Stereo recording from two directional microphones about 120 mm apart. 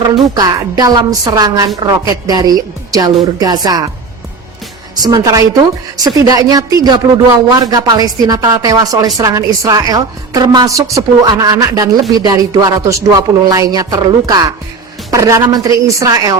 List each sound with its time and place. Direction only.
0.3 s speech: 35° right (ahead or behind)
5.0 s a woman's voice: 30° right (ahead or behind)